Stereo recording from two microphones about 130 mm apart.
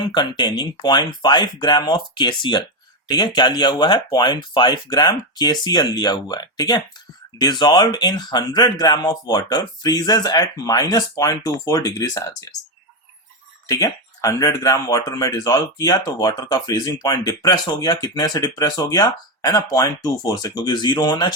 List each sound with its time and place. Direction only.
0.0 s speech: 35° left (ahead or behind)
13.7 s speech: 25° left (ahead or behind)